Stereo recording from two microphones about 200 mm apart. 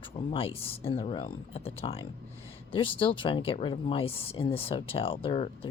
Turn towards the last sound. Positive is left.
turn(degrees=30)  # may be behind; listen again after turning